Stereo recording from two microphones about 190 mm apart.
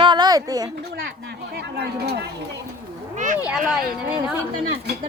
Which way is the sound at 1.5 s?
60° right (ahead or behind).